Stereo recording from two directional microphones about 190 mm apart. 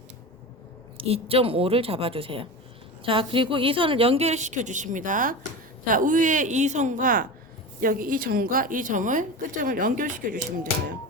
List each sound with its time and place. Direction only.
0.9 s a woman's voice: 30° right (ahead or behind)